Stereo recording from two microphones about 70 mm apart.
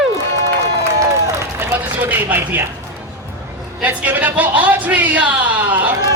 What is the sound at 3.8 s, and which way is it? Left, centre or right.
A man's voice, right.